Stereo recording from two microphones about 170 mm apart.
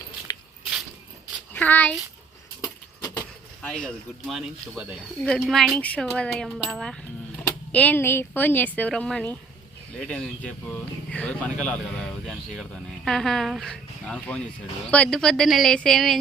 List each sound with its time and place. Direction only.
1.5 s a child's voice: 10° left (ahead or behind)
2.6 s keys jangling: 20° left (ahead or behind)
3.6 s speech: 5° left (ahead or behind)